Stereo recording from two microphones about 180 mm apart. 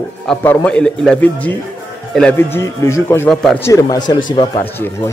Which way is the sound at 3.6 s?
20° left (ahead or behind).